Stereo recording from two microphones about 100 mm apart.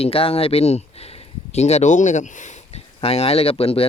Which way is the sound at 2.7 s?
80° left.